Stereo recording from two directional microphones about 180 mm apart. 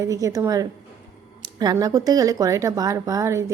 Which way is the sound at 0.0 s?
15° right (ahead or behind).